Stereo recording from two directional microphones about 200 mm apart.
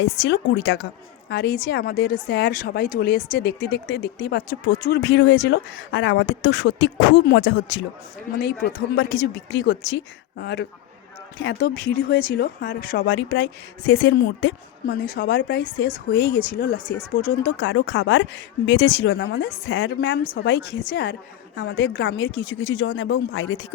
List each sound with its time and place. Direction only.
0.0 s speech: 65° left (ahead or behind); by 13.0 s 45° left (ahead or behind)
13.0 s speech: 65° left (ahead or behind); by 17.7 s 50° left (ahead or behind)
17.7 s speech: 65° left (ahead or behind)